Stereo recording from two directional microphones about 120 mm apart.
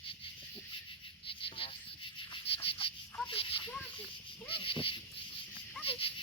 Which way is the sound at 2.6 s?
50° left (ahead or behind).